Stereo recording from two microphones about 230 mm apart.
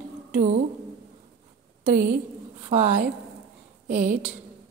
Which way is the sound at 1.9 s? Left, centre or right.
Right.